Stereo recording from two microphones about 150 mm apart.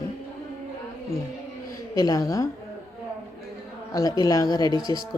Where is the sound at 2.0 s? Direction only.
25° left (ahead or behind).